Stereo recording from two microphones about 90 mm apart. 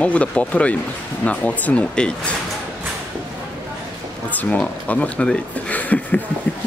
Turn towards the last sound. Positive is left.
turn(degrees=20)  # may be behind; listen again after turning